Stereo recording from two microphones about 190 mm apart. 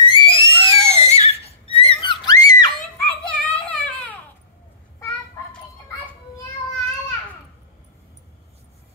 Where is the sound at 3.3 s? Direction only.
5° left (ahead or behind).